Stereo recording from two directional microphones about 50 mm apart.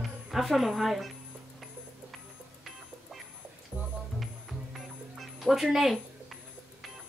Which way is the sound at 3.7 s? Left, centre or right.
Right.